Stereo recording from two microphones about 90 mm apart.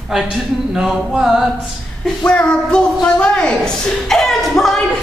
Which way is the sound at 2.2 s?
10° left (ahead or behind).